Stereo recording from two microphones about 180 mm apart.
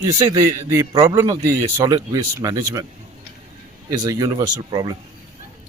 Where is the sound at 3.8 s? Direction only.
20° right (ahead or behind).